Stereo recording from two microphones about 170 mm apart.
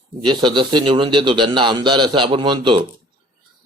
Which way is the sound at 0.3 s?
25° right (ahead or behind).